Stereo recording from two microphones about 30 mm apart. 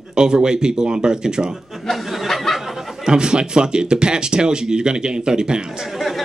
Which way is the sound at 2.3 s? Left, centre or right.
Centre.